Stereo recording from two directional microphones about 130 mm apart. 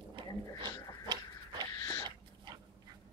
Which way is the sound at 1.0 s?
35° right (ahead or behind).